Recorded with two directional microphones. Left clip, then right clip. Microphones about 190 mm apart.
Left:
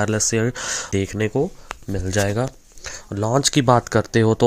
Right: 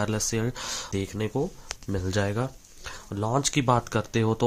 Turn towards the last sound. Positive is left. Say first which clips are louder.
# left 9 dB
turn(degrees=30)  # may be behind; listen again after turning